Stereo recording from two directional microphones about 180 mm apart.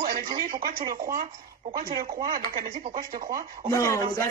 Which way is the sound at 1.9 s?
25° right (ahead or behind).